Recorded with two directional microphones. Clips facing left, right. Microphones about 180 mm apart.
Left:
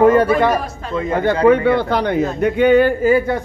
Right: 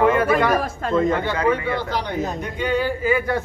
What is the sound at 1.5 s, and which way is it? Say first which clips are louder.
Speech: left 10 dB; 60° left (ahead or behind).